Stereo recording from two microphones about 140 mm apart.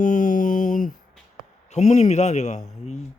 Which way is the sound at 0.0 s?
65° left (ahead or behind).